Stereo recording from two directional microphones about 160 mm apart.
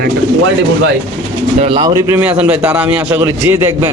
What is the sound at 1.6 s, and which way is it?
Speech, 30° right (ahead or behind).